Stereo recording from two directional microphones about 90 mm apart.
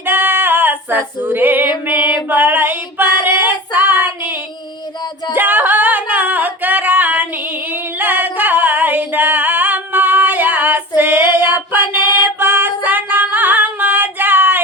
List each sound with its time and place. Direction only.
0.0 s female singing: 25° right (ahead or behind)
5.3 s singing: 20° right (ahead or behind)
11.3 s music: 20° right (ahead or behind)